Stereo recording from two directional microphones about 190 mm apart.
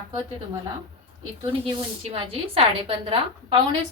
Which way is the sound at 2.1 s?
30° right (ahead or behind).